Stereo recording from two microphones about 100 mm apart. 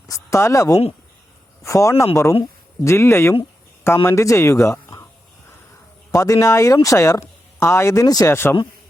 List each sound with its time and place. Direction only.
0.1 s speech: 30° left (ahead or behind)
6.1 s speech: 35° left (ahead or behind)
8.3 s speech: 25° left (ahead or behind)